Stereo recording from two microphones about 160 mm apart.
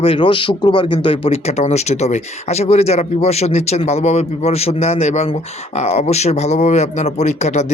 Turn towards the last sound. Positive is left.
turn(degrees=45)  # may be behind; listen again after turning